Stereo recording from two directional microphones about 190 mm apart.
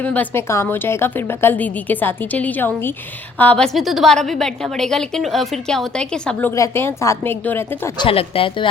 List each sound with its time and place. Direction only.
0.0 s a woman's voice: 10° left (ahead or behind)
7.9 s speech: 30° left (ahead or behind)